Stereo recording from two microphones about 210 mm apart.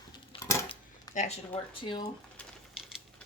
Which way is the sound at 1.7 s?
20° left (ahead or behind).